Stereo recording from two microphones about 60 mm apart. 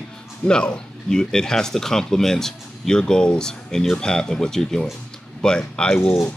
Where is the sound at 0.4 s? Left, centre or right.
Centre.